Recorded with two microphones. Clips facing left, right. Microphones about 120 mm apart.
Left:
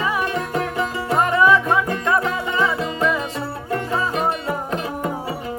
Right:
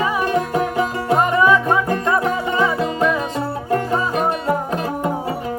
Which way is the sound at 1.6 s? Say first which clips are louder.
Right 2 dB; 35° right (ahead or behind).